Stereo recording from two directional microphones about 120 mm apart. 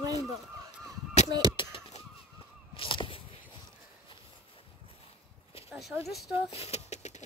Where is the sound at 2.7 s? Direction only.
45° left (ahead or behind).